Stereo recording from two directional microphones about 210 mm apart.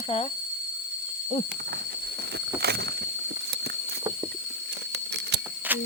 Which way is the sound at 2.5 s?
50° right (ahead or behind).